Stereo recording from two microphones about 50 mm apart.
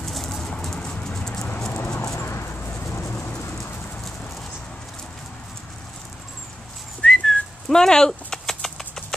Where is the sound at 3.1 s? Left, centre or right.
Left.